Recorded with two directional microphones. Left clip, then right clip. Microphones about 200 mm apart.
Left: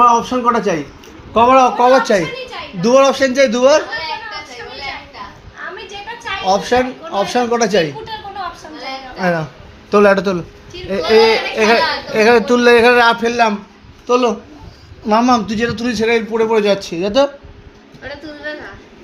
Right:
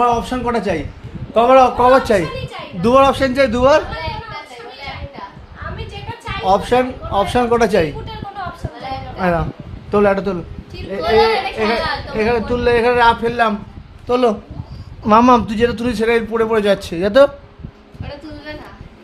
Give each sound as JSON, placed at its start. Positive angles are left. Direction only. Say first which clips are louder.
{"t": 0.0, "sound": "a man's voice", "louder": "left 5 dB", "side_deg": -10}
{"t": 6.4, "sound": "a man's voice", "louder": "even", "side_deg": -10}
{"t": 9.2, "sound": "a man's voice", "louder": "even", "side_deg": -5}
{"t": 9.9, "sound": "a man's voice", "louder": "left 4 dB", "side_deg": 10}
{"t": 10.9, "sound": "speech", "louder": "left 3 dB", "side_deg": 20}
{"t": 14.1, "sound": "a man's voice", "louder": "left 1 dB", "side_deg": -15}
{"t": 15.0, "sound": "a man's voice", "louder": "right 2 dB", "side_deg": -25}
{"t": 15.4, "sound": "a man's voice", "louder": "right 1 dB", "side_deg": -10}